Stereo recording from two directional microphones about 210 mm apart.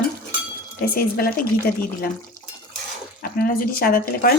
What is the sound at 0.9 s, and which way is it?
Speech, 45° left (ahead or behind).